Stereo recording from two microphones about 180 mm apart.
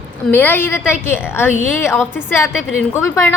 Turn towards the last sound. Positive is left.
turn(degrees=15)  # may be behind; listen again after turning